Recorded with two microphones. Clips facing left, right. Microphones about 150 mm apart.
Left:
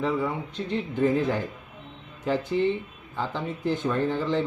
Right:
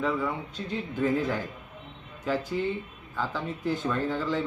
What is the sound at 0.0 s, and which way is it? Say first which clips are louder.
Speech: left 2 dB; 20° left (ahead or behind).